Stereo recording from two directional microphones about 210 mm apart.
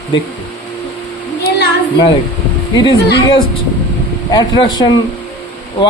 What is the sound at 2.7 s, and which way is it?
A man's voice, 20° left (ahead or behind).